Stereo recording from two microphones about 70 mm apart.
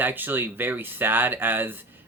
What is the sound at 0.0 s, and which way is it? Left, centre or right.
Speech, right.